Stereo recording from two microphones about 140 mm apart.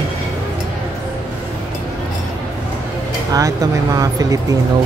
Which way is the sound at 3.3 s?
25° right (ahead or behind).